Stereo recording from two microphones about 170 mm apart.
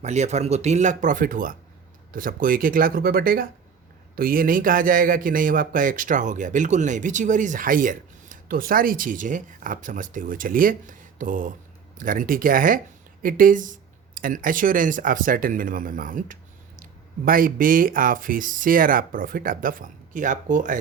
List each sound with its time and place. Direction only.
0.0 s a man's voice: 40° right (ahead or behind)